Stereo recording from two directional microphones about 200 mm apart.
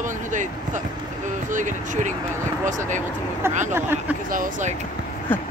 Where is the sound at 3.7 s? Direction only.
10° right (ahead or behind).